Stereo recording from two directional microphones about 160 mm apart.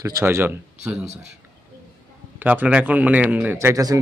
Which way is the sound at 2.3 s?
10° right (ahead or behind).